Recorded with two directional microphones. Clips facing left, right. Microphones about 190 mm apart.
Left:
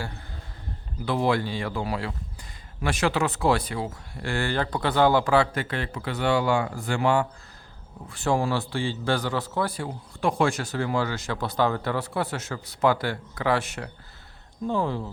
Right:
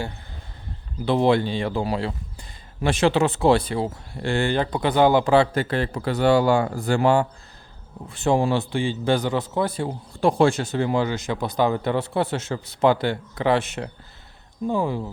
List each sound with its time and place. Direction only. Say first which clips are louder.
1.0 s a man's voice: right 5 dB; 25° right (ahead or behind)
8.1 s a man's voice: right 4 dB; 20° right (ahead or behind)
14.7 s speech: right 2 dB; 10° right (ahead or behind)